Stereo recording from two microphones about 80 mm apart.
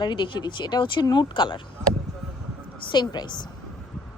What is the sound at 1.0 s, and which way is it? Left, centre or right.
Speech, left.